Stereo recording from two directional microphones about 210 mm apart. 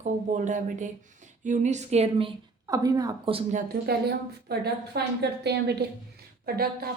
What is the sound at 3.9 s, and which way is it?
A woman's voice, 50° right (ahead or behind).